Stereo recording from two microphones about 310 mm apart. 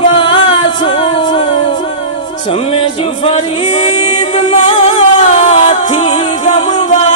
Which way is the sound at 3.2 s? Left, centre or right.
Centre.